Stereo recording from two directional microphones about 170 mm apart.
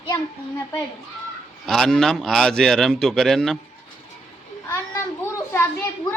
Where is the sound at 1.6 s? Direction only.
Centre (ahead or behind).